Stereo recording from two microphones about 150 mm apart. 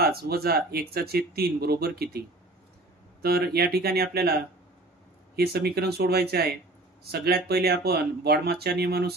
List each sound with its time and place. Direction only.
0.0 s speech: 90° right